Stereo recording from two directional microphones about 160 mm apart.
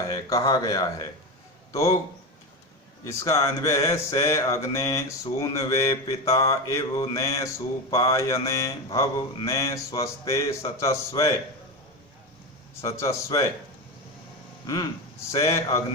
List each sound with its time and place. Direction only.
0.1 s mantra: 20° left (ahead or behind)
3.0 s mantra: 20° left (ahead or behind)
12.8 s mantra: 20° left (ahead or behind)
15.3 s mantra: 20° left (ahead or behind)